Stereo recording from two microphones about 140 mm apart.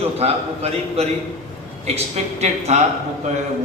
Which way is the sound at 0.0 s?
45° right (ahead or behind).